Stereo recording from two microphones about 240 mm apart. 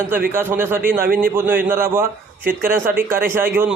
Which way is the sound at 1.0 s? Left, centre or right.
Right.